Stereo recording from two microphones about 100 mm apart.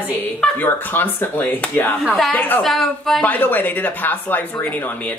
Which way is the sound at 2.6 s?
Centre (ahead or behind).